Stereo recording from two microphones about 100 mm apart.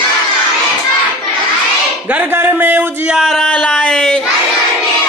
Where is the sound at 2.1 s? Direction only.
20° right (ahead or behind).